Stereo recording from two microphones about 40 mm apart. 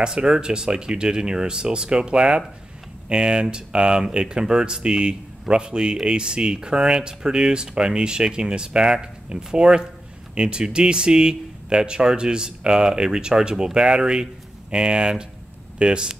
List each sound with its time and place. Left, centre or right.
0.0 s speech: centre